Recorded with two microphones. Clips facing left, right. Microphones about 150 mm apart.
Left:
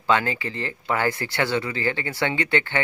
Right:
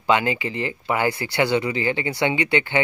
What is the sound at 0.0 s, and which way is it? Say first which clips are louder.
Speech: right 2 dB; 15° right (ahead or behind).